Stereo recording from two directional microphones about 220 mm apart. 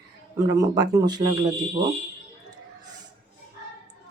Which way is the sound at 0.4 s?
15° right (ahead or behind).